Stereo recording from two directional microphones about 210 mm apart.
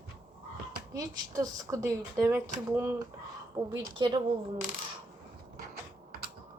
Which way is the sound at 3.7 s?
25° right (ahead or behind).